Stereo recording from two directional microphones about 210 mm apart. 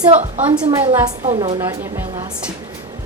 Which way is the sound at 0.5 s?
15° right (ahead or behind).